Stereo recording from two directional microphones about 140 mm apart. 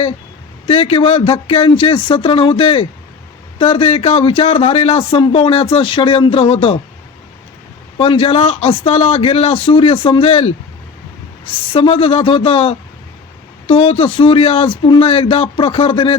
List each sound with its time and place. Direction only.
0.7 s a man's voice: 40° left (ahead or behind)
7.9 s a man's voice: 40° left (ahead or behind)
11.7 s speech: 40° left (ahead or behind)